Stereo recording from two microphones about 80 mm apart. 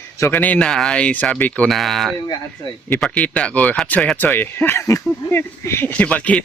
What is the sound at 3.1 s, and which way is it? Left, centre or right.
Speech, centre.